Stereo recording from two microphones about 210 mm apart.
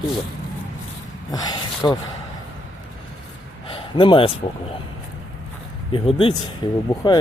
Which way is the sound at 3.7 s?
25° left (ahead or behind).